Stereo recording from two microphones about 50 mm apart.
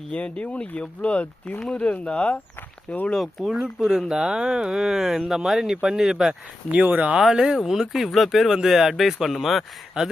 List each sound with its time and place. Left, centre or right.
0.1 s speech: left
3.2 s speech: centre
6.7 s speech: right
7.2 s speech: centre